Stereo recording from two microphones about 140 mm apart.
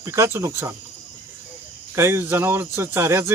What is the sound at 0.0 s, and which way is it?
Speech, 20° right (ahead or behind).